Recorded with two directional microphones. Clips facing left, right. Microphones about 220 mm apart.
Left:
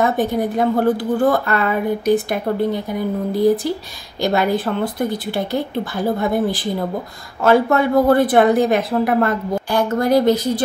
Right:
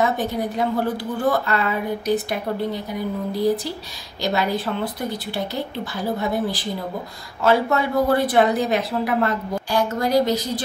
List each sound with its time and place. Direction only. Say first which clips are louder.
0.0 s a woman's voice: left 4 dB; 50° left (ahead or behind)